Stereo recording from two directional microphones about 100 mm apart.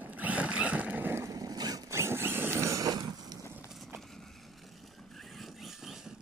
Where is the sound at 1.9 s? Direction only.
25° right (ahead or behind).